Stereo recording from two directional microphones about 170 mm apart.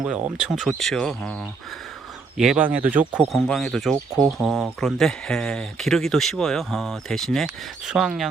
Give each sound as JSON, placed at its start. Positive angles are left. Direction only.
{"t": 0.0, "sound": "speech", "side_deg": -5}
{"t": 2.4, "sound": "speech", "side_deg": -5}
{"t": 3.9, "sound": "speech", "side_deg": -20}
{"t": 4.4, "sound": "speech", "side_deg": -5}